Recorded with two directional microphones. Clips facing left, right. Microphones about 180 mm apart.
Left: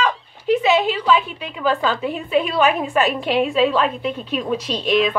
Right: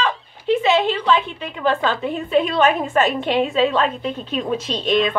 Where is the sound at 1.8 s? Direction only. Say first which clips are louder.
Even; centre (ahead or behind).